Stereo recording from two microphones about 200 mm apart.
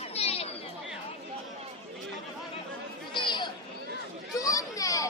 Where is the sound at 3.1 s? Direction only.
20° left (ahead or behind).